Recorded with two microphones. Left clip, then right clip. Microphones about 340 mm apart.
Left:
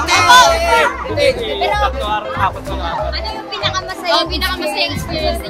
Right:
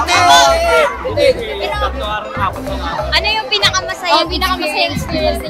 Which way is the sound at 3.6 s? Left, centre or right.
Right.